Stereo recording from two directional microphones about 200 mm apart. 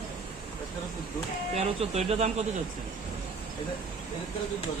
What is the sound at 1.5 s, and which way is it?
Speech, 30° right (ahead or behind).